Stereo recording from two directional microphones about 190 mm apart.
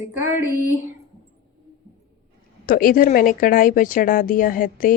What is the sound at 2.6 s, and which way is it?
Speech, 45° left (ahead or behind).